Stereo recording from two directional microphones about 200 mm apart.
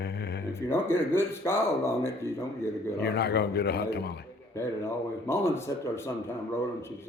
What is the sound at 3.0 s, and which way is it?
Speech, 55° left (ahead or behind).